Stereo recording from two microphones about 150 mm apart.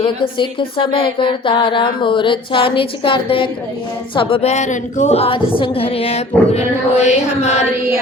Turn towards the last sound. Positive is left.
turn(degrees=45)  # may be behind; listen again after turning